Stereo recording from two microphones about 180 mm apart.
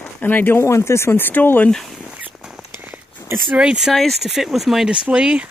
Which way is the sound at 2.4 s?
5° right (ahead or behind).